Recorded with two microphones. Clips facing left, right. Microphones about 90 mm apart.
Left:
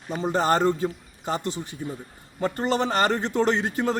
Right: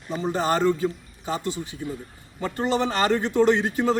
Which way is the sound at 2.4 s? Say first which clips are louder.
Even; 40° left (ahead or behind).